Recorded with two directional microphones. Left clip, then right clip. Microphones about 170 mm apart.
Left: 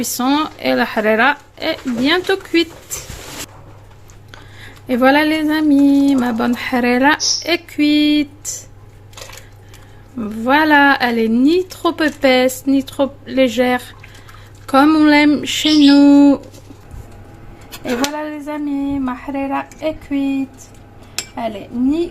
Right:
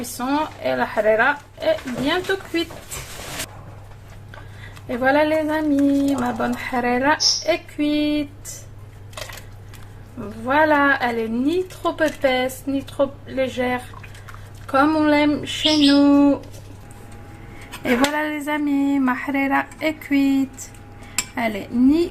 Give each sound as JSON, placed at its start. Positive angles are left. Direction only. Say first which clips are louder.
{"t": 0.2, "sound": "a woman's voice", "louder": "left 5 dB", "side_deg": 65}
{"t": 4.9, "sound": "a woman's voice", "louder": "left 5 dB", "side_deg": 75}
{"t": 10.2, "sound": "a woman's voice", "louder": "left 4 dB", "side_deg": 70}
{"t": 17.8, "sound": "speech", "louder": "right 1 dB", "side_deg": 10}
{"t": 21.3, "sound": "speech", "louder": "even", "side_deg": 10}